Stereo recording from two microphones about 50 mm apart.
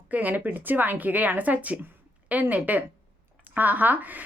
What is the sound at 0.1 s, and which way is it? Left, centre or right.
A woman's voice, right.